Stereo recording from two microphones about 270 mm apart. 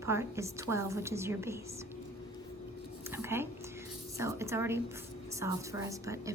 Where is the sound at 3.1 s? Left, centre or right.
Centre.